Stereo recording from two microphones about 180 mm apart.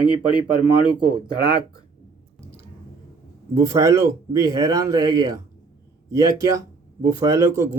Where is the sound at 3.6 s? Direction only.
15° right (ahead or behind).